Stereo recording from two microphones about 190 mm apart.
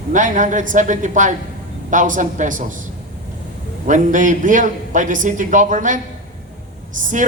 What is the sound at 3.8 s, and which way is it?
A man's voice, 40° right (ahead or behind).